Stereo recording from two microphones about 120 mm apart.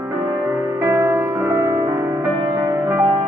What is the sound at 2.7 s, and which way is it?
Music, 20° right (ahead or behind).